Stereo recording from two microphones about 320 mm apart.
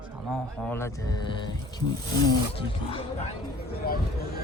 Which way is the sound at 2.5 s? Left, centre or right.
Centre.